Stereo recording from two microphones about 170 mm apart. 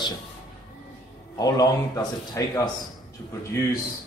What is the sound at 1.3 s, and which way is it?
Speech, 25° left (ahead or behind).